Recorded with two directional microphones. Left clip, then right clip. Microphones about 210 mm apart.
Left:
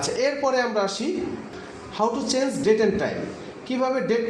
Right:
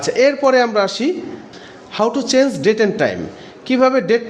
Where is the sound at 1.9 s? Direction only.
55° right (ahead or behind).